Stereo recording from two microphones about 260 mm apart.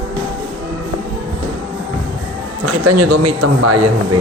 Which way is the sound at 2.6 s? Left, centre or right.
Right.